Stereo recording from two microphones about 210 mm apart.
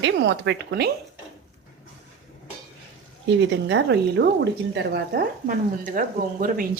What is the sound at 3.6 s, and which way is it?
A woman's voice, 55° right (ahead or behind).